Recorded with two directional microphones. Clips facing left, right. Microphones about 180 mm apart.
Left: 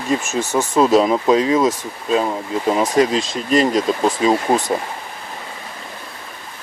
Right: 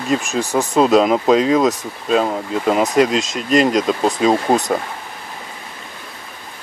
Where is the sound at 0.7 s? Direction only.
20° right (ahead or behind).